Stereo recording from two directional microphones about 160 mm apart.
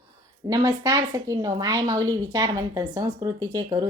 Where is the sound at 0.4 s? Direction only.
25° right (ahead or behind).